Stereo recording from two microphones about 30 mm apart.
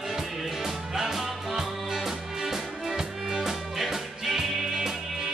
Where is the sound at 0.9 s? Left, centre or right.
Centre.